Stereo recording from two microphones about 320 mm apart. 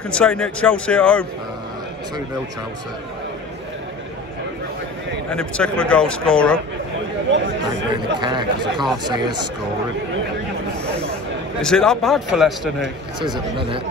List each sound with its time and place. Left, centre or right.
0.1 s a man's voice: centre
5.3 s a man's voice: centre
7.2 s speech: right
8.2 s speech: centre
11.6 s a man's voice: centre